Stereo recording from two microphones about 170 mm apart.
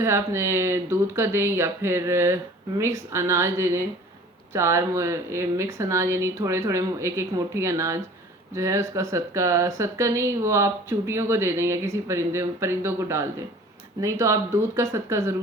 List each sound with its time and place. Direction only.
0.0 s speech: 15° right (ahead or behind)